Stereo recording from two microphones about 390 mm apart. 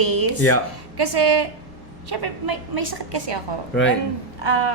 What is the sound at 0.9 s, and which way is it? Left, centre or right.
Speech, right.